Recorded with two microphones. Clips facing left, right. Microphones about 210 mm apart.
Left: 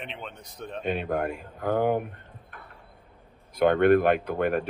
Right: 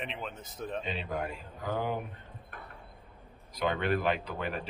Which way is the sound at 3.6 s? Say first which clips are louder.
Left 10 dB; 55° left (ahead or behind).